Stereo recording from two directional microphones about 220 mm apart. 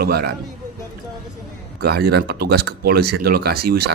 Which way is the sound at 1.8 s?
45° right (ahead or behind).